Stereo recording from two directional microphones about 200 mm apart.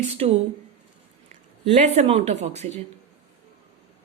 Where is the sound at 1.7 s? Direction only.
35° right (ahead or behind).